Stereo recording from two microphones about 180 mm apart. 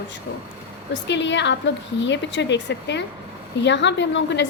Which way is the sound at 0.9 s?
80° left.